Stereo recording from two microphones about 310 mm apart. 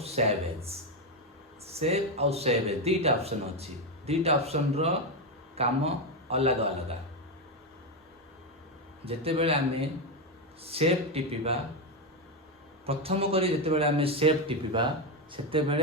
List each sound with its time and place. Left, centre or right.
0.0 s a man's voice: centre
9.0 s speech: centre
10.6 s speech: centre
12.8 s a man's voice: centre